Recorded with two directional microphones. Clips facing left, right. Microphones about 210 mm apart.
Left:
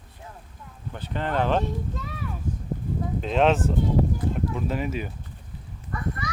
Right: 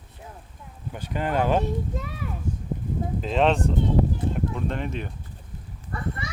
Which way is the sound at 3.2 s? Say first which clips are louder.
Left 1 dB; centre (ahead or behind).